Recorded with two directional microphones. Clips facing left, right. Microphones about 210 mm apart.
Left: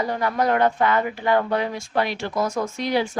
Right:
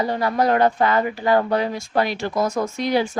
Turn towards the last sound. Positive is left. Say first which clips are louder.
# right 2 dB
turn(degrees=-45)  # may be behind; listen again after turning